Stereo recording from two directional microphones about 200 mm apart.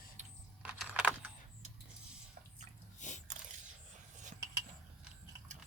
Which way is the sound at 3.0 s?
35° left (ahead or behind).